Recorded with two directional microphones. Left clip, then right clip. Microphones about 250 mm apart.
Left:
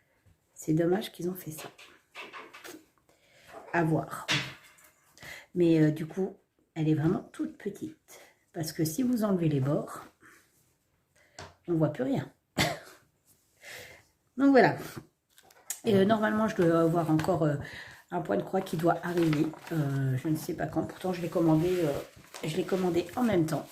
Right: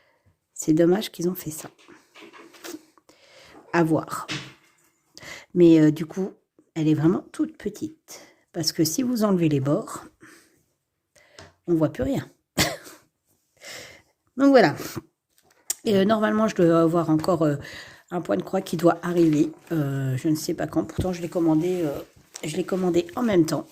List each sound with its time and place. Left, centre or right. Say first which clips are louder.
0.6 s speech: right 8 dB; right
2.6 s writing: right 8 dB; right
5.1 s speech: right 8 dB; right
11.6 s throat clearing: right 6 dB; right
13.6 s sniff: right 6 dB; right
14.3 s speech: right 5 dB; right